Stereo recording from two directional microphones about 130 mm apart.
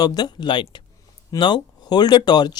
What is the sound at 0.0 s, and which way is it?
Speech, 30° left (ahead or behind).